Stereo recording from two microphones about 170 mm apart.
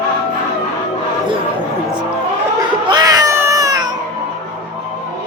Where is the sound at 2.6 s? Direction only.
25° right (ahead or behind).